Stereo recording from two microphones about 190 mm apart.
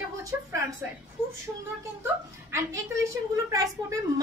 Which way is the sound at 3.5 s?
20° right (ahead or behind).